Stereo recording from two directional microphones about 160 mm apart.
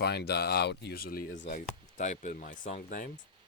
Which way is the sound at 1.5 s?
50° left (ahead or behind).